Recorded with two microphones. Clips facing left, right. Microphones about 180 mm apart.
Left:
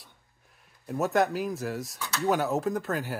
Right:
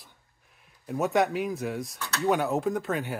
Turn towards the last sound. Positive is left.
turn(degrees=0)  # may be behind; listen again after turning